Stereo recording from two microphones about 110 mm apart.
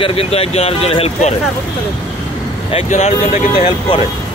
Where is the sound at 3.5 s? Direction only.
55° left (ahead or behind).